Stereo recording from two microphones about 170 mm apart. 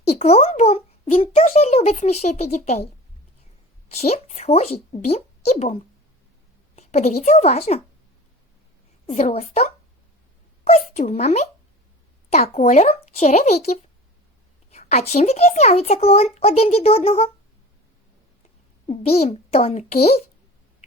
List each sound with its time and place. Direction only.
0.2 s a child's voice: 40° left (ahead or behind)
3.9 s a child's voice: 40° left (ahead or behind)
6.7 s a woman's voice: 40° left (ahead or behind)
9.0 s a child's voice: 40° left (ahead or behind)
18.9 s a child's voice: 35° left (ahead or behind)